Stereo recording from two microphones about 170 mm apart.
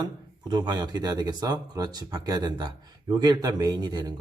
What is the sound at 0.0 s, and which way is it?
Speech, 25° right (ahead or behind).